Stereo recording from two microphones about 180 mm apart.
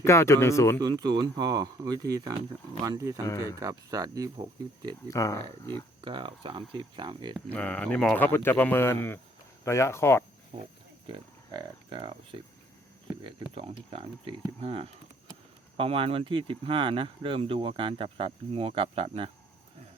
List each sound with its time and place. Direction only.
0.0 s speech: 15° left (ahead or behind)
0.8 s speech: 20° right (ahead or behind)
5.0 s speech: 20° left (ahead or behind)
6.0 s speech: 30° right (ahead or behind)
7.5 s speech: 10° left (ahead or behind)
10.5 s speech: 30° right (ahead or behind)